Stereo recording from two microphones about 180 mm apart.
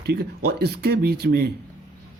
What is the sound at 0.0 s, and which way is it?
Speech, 60° right (ahead or behind).